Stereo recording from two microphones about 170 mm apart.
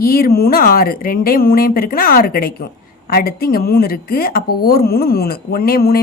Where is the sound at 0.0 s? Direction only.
60° left (ahead or behind).